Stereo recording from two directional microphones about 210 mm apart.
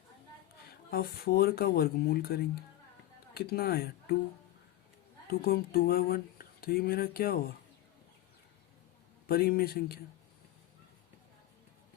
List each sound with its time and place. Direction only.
0.6 s speech: 45° left (ahead or behind)
5.3 s speech: 45° left (ahead or behind)
9.2 s speech: 45° left (ahead or behind)